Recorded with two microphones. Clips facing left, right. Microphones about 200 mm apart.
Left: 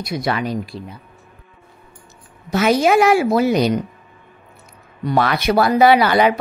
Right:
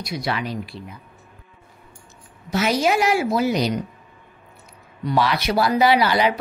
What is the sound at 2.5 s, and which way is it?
A woman's voice, 55° left (ahead or behind).